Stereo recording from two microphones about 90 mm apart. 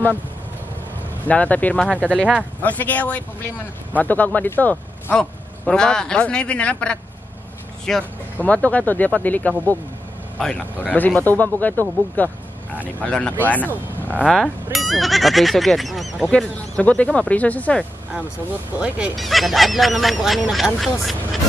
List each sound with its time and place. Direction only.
1.2 s speech: 15° left (ahead or behind)
1.9 s speech: 15° right (ahead or behind)
2.6 s a man's voice: 20° left (ahead or behind)
8.4 s speech: 15° left (ahead or behind)
10.9 s speech: 15° left (ahead or behind)
14.2 s speech: centre (ahead or behind)
16.3 s speech: 10° left (ahead or behind)
18.8 s speech: 15° right (ahead or behind)
19.1 s speech: centre (ahead or behind)